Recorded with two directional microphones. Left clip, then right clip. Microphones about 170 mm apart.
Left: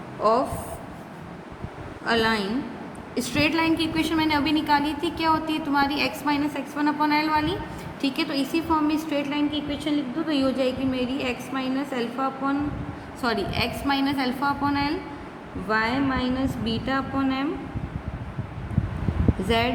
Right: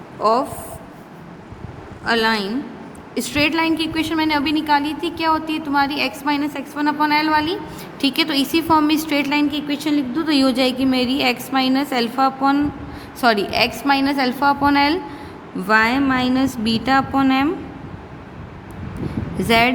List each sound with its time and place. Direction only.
0.2 s speech: 60° right (ahead or behind)
2.0 s a woman's voice: 60° right (ahead or behind); by 7.6 s 40° right (ahead or behind)
8.0 s a woman's voice: 50° right (ahead or behind)
13.2 s a woman's voice: 45° right (ahead or behind)
15.6 s a woman's voice: 70° right (ahead or behind)
19.5 s a woman's voice: 60° right (ahead or behind)